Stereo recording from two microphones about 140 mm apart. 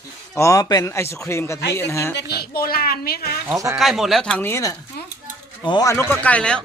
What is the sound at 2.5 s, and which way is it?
Speech, 90° left.